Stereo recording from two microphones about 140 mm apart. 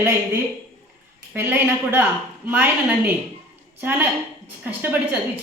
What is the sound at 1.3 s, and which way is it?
Speech, 15° right (ahead or behind).